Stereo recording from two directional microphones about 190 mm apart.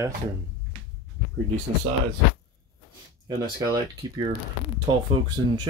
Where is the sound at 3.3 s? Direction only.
20° right (ahead or behind).